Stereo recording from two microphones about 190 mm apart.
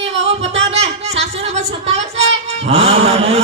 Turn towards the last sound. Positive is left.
turn(degrees=-35)  # may be behind; listen again after turning